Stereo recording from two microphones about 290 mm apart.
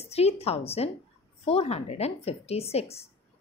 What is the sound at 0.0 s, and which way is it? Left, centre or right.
Speech, left.